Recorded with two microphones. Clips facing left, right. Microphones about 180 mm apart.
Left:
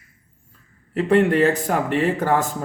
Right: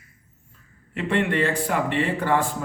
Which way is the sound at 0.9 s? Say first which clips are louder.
Left 7 dB; 40° left (ahead or behind).